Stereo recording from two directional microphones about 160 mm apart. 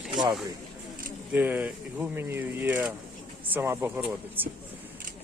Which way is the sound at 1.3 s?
10° right (ahead or behind).